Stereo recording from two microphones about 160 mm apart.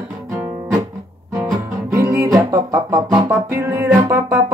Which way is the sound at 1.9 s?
15° right (ahead or behind).